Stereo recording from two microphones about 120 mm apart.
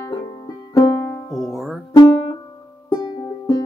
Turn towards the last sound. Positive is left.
turn(degrees=30)  # may be behind; listen again after turning